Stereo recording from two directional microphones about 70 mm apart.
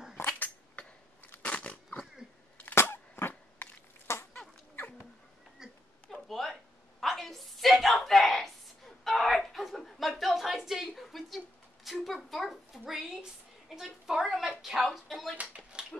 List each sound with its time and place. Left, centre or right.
0.3 s dog: centre
1.3 s crunch: centre
2.7 s a sound: left
4.7 s cat: left
5.6 s a sound: centre
14.9 s music: centre
15.7 s dog: centre